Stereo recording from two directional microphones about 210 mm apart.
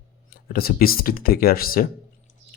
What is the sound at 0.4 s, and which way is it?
Speech, 45° left (ahead or behind).